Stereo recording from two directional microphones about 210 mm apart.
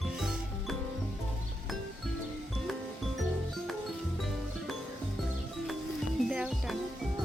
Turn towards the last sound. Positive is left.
turn(degrees=-5)  # may be behind; listen again after turning